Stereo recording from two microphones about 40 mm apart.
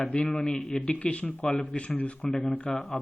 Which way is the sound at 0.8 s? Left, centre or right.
Left.